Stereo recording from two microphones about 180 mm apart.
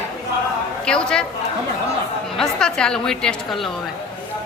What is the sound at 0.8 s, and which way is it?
Speech, 5° left (ahead or behind).